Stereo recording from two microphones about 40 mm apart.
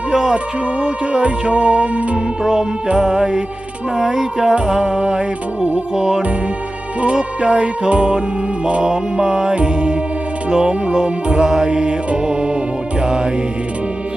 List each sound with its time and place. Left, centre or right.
0.1 s music: centre
0.8 s speech: right
2.4 s music: centre
4.5 s speech: right
5.9 s music: centre
7.0 s speech: right
11.4 s music: centre
11.7 s speech: right
13.0 s music: right